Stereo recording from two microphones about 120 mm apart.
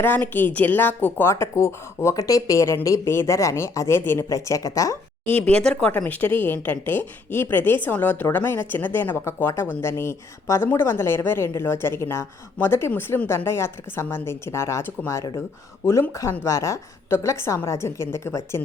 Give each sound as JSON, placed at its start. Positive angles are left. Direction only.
{"t": 0.0, "sound": "a woman's voice", "side_deg": 15}
{"t": 5.5, "sound": "a woman's voice", "side_deg": 10}